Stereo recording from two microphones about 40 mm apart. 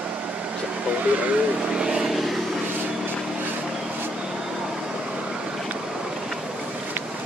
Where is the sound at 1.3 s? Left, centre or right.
Right.